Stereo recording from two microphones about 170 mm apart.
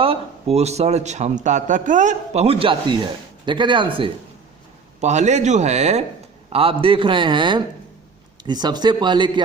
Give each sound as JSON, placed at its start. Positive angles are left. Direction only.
{"t": 0.0, "sound": "speech", "side_deg": -35}
{"t": 4.9, "sound": "a man's voice", "side_deg": -40}